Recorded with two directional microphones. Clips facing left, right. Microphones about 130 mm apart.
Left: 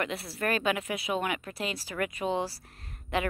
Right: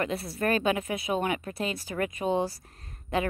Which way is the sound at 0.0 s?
35° right (ahead or behind).